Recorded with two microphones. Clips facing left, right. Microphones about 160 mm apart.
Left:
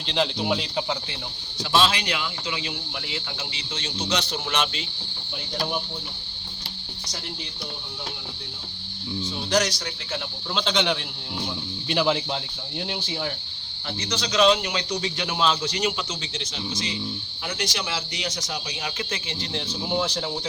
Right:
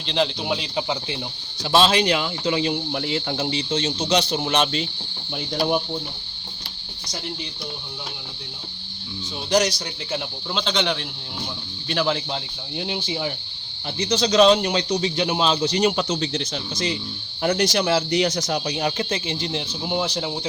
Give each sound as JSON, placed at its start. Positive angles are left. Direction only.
{"t": 0.0, "sound": "speech", "side_deg": 0}
{"t": 1.6, "sound": "speech", "side_deg": -30}
{"t": 9.5, "sound": "speech", "side_deg": -20}
{"t": 10.5, "sound": "speech", "side_deg": 0}
{"t": 12.7, "sound": "speech", "side_deg": -5}
{"t": 14.0, "sound": "speech", "side_deg": -25}
{"t": 19.1, "sound": "speech", "side_deg": -20}